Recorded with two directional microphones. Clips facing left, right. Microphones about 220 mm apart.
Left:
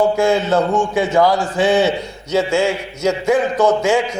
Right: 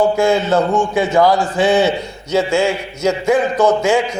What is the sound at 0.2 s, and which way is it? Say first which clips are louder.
A man's voice: right 1 dB; 15° right (ahead or behind).